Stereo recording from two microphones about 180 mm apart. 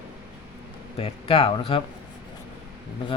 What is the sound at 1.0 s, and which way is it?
Speech, 30° left (ahead or behind).